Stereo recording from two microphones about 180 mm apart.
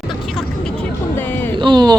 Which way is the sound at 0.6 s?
10° left (ahead or behind).